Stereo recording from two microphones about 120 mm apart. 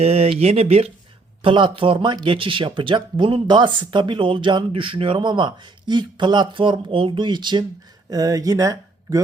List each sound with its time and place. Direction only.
0.0 s speech: 60° right (ahead or behind)
1.4 s speech: 45° right (ahead or behind); by 9.2 s 25° right (ahead or behind)